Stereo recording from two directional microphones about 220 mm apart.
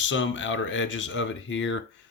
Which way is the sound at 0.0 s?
60° left (ahead or behind).